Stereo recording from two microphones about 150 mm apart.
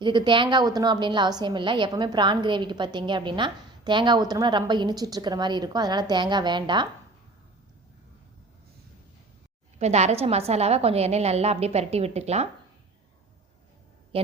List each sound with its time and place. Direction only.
0.0 s a woman's voice: 30° right (ahead or behind)
9.7 s a woman's voice: 45° right (ahead or behind)